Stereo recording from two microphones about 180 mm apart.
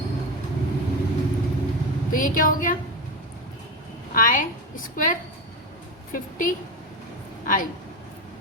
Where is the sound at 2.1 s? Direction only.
50° left (ahead or behind).